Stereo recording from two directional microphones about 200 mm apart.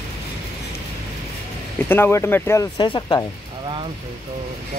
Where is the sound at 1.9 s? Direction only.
10° left (ahead or behind).